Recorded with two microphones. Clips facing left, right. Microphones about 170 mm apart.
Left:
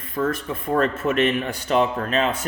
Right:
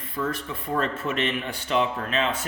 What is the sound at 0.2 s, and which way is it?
Speech, 50° left (ahead or behind).